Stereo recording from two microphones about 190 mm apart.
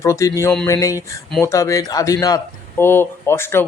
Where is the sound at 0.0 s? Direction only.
15° left (ahead or behind).